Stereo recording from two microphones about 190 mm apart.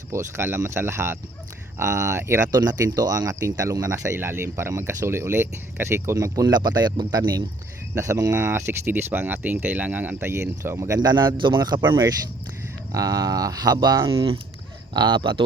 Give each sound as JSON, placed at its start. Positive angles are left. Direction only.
{"t": 0.1, "sound": "speech", "side_deg": -15}